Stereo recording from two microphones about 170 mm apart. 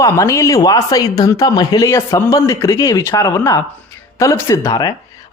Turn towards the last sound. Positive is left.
turn(degrees=20)  # may be behind; listen again after turning